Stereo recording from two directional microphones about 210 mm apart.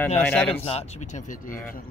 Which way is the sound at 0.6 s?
30° left (ahead or behind).